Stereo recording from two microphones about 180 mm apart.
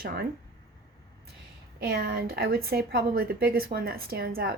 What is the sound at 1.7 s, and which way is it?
A woman's voice, 55° right (ahead or behind).